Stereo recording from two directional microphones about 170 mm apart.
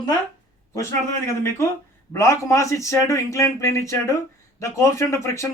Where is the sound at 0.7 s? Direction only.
15° left (ahead or behind).